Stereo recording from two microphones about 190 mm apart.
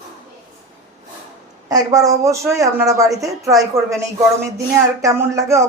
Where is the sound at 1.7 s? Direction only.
20° right (ahead or behind).